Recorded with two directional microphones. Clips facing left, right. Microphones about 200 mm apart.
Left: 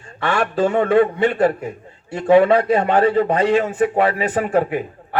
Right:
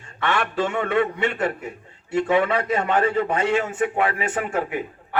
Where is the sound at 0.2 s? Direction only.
35° left (ahead or behind).